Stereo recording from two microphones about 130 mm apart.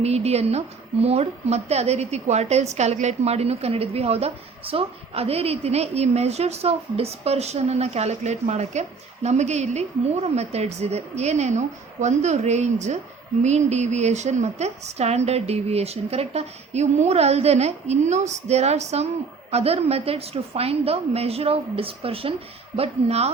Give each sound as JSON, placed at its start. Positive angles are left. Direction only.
{"t": 0.0, "sound": "a woman's voice", "side_deg": -55}